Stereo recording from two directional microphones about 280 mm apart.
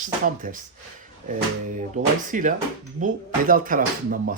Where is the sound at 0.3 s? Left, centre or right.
Right.